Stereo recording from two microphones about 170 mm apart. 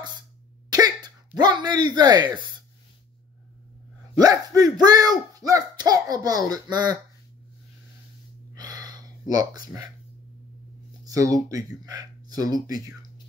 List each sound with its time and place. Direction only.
0.7 s throat clearing: 25° right (ahead or behind)
4.2 s speech: 20° right (ahead or behind)
8.5 s a sound: 25° right (ahead or behind)
11.1 s speech: 20° right (ahead or behind)